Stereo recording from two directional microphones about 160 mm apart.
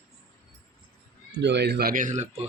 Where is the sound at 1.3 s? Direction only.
90° right; by 2.3 s 50° right (ahead or behind).